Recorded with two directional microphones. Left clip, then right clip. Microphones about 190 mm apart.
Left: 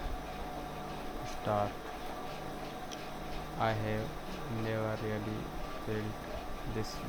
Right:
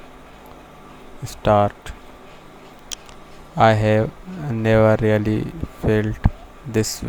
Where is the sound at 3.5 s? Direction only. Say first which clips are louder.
Right 19 dB; 60° right (ahead or behind).